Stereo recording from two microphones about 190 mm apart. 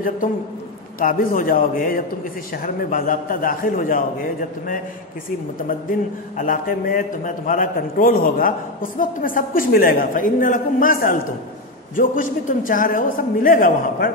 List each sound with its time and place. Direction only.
0.2 s a man's voice: 45° left (ahead or behind)